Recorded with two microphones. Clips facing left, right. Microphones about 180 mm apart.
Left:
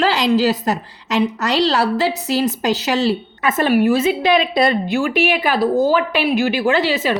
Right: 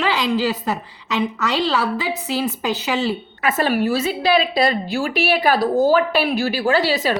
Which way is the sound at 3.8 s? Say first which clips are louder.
Left 4 dB; 35° right (ahead or behind).